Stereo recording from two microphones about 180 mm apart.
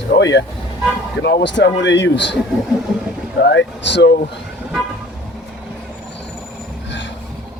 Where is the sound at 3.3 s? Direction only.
70° left (ahead or behind).